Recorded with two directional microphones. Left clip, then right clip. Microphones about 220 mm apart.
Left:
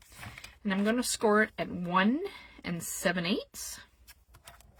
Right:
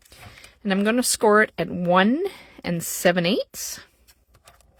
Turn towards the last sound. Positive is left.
turn(degrees=-40)  # may be behind; listen again after turning